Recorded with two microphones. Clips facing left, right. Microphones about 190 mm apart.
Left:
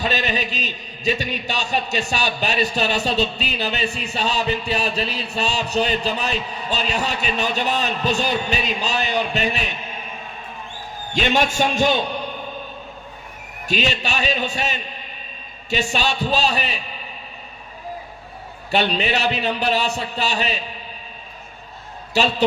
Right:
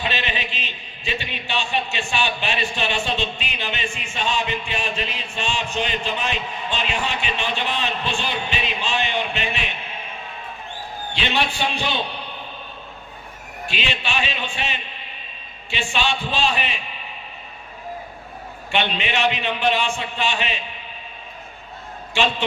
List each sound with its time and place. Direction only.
0.0 s a man's voice: 40° left (ahead or behind)
11.1 s a man's voice: 45° left (ahead or behind)
13.7 s a man's voice: 40° left (ahead or behind)
18.7 s a man's voice: 40° left (ahead or behind)
22.1 s a man's voice: 40° left (ahead or behind)